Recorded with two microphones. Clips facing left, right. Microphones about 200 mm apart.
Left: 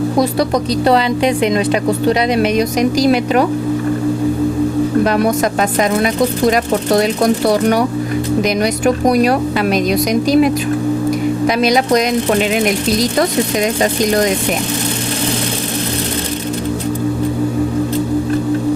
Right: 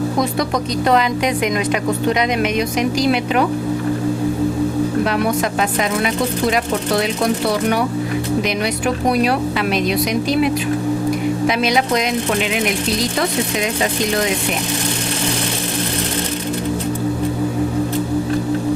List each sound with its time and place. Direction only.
0.9 s speech: 30° left (ahead or behind)
5.0 s speech: 40° left (ahead or behind)
6.5 s speech: 40° left (ahead or behind)